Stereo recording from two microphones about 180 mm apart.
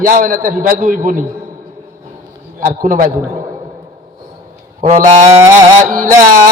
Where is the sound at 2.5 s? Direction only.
50° right (ahead or behind).